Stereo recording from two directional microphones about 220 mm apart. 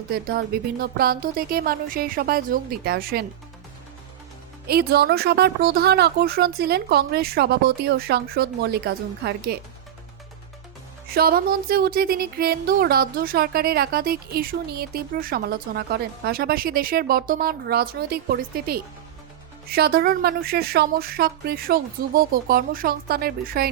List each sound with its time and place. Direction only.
0.1 s speech: 45° right (ahead or behind)
4.6 s speech: 45° right (ahead or behind)
11.1 s speech: 45° right (ahead or behind)